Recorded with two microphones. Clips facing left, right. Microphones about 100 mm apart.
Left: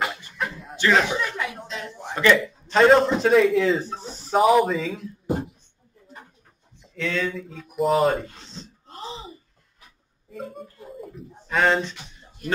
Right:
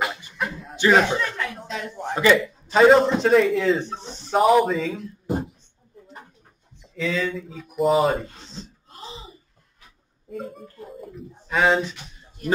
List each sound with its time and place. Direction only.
0.7 s speech: 15° right (ahead or behind)
1.0 s chuckle: 10° left (ahead or behind)
1.9 s a man's voice: 15° right (ahead or behind)
2.8 s a man's voice: centre (ahead or behind)
7.0 s a man's voice: centre (ahead or behind)
11.0 s speech: centre (ahead or behind)